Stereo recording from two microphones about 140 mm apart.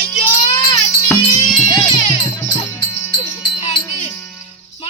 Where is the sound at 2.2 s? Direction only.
15° left (ahead or behind).